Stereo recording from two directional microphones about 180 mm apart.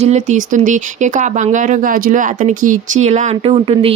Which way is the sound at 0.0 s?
40° right (ahead or behind).